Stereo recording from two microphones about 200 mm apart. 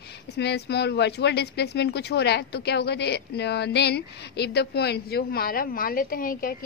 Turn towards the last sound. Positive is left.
turn(degrees=45)  # may be behind; listen again after turning